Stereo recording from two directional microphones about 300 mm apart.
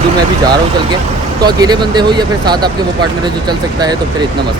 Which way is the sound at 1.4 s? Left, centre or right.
Centre.